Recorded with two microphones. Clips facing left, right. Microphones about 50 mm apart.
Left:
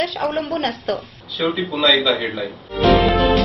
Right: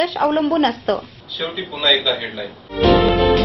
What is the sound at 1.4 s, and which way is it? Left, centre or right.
A woman's voice, centre.